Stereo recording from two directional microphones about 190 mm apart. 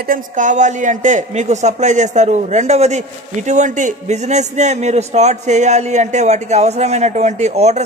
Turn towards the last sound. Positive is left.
turn(degrees=-35)  # may be behind; listen again after turning